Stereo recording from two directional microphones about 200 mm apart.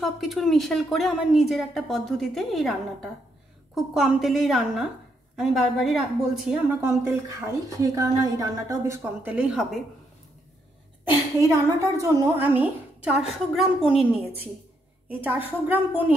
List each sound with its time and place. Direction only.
0.0 s a woman's voice: centre (ahead or behind)
6.8 s a woman's voice: 15° right (ahead or behind)
11.1 s a woman's voice: 15° right (ahead or behind)
15.0 s a woman's voice: 10° right (ahead or behind)